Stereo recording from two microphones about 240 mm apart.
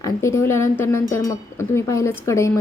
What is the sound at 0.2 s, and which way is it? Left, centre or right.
A woman's voice, centre.